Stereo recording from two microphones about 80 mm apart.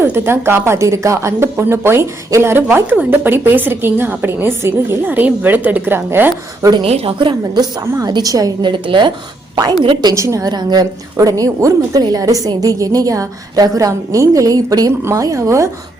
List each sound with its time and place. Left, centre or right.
0.0 s speech: right
6.6 s a woman's voice: right
8.1 s a woman's voice: right
8.7 s a woman's voice: right
10.2 s speech: right
10.5 s a woman's voice: right
11.2 s a woman's voice: right